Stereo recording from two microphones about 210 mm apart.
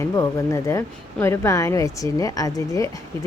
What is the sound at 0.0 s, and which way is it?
A woman's voice, 15° left (ahead or behind).